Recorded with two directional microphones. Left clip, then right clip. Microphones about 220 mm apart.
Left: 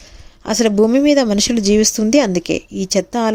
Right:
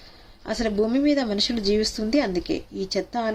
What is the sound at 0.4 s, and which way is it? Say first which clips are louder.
Speech: left 10 dB; 40° left (ahead or behind).